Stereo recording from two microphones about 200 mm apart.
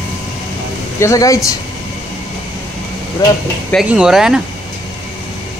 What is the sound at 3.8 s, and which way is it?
Speech, 5° right (ahead or behind).